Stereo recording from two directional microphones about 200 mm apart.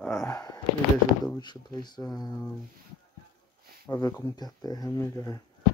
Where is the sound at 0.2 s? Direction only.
15° left (ahead or behind).